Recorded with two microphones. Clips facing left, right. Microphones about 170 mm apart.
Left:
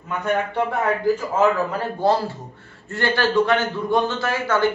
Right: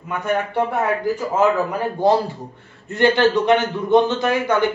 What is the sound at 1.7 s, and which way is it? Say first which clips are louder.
A man's voice: right 3 dB; 15° right (ahead or behind).